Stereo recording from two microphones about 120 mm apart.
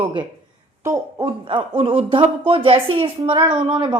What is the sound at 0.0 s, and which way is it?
Speech, 45° right (ahead or behind).